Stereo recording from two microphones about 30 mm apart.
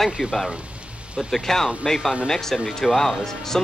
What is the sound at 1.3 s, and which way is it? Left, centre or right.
Speech, centre.